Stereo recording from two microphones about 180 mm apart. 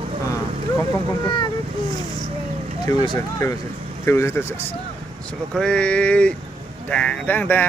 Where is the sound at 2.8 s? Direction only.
20° left (ahead or behind).